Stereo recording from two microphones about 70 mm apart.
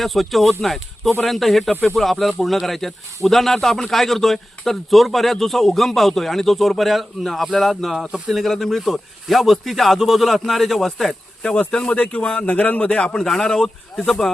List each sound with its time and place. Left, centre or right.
0.0 s a man's voice: centre; by 12.9 s left
13.1 s a man's voice: centre